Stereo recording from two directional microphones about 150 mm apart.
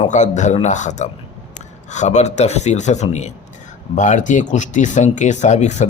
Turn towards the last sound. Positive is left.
turn(degrees=50)  # may be behind; listen again after turning